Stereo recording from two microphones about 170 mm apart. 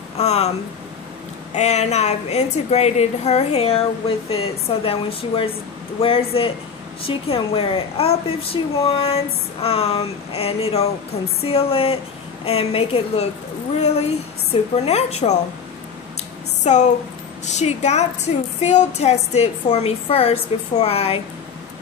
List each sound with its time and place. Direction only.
0.2 s a woman's voice: 40° left (ahead or behind)
1.5 s a woman's voice: 40° left (ahead or behind)
4.8 s a woman's voice: 35° left (ahead or behind)
16.6 s a woman's voice: 45° left (ahead or behind)